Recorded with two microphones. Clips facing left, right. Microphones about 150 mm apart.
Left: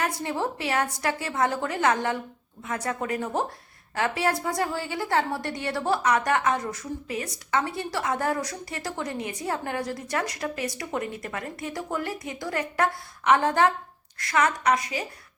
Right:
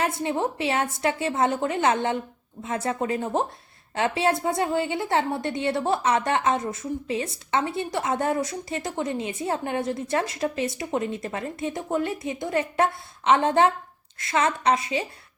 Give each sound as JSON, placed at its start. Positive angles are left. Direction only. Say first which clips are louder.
{"t": 0.0, "sound": "a woman's voice", "louder": "right 3 dB", "side_deg": -25}